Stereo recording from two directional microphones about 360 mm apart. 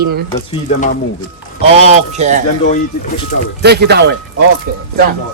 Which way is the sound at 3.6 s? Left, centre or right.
Right.